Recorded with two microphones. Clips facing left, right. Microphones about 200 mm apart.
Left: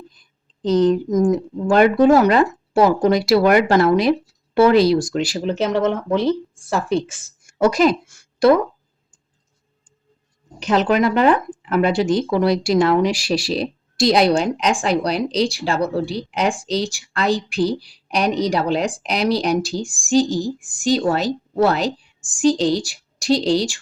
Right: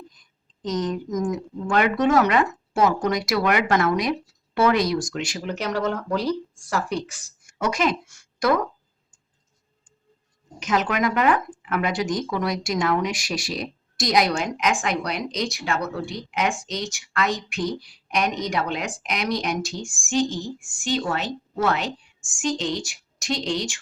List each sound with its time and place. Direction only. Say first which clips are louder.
0.1 s a woman's voice: left 3 dB; 30° left (ahead or behind)
10.6 s speech: left 6 dB; 30° left (ahead or behind)